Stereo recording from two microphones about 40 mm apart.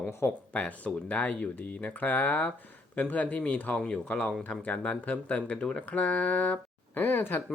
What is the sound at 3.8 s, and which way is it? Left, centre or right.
Speech, left.